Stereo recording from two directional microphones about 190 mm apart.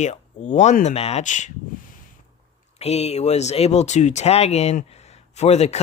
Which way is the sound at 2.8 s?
35° left (ahead or behind).